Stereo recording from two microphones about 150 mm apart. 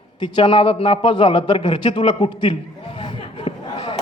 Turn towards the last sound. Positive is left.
turn(degrees=35)  # may be behind; listen again after turning